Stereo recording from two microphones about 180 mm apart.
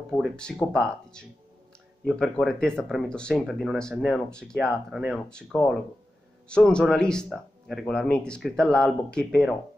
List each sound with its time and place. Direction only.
0.1 s speech: 5° left (ahead or behind)